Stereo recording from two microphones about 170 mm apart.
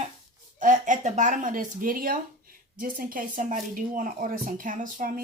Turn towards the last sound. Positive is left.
turn(degrees=-50)  # may be behind; listen again after turning